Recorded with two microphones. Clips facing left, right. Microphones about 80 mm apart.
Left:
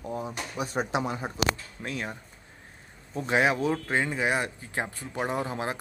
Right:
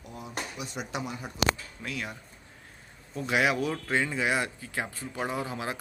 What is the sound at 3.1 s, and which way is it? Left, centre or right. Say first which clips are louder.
Speech: left 2 dB; left.